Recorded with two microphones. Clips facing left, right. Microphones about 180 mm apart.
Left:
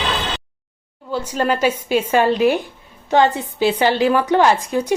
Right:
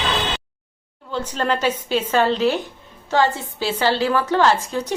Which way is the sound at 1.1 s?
10° left (ahead or behind).